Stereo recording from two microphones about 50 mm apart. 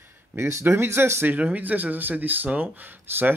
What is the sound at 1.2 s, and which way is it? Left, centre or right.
Speech, right.